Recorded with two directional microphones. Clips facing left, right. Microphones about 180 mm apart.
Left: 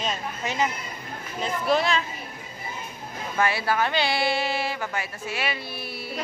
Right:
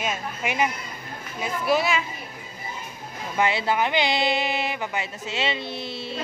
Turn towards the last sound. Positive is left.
turn(degrees=-25)  # may be behind; listen again after turning